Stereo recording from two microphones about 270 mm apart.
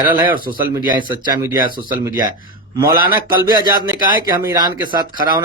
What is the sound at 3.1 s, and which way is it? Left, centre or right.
Speech, centre.